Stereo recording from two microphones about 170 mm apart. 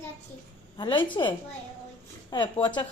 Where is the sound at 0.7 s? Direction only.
30° left (ahead or behind).